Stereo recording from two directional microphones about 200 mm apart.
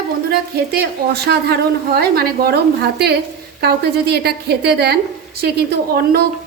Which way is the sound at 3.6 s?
55° right (ahead or behind).